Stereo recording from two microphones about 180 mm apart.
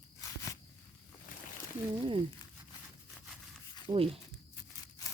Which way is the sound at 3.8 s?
30° right (ahead or behind).